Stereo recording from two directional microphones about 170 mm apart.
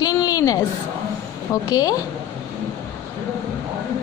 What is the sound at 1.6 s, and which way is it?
Speech, 20° left (ahead or behind).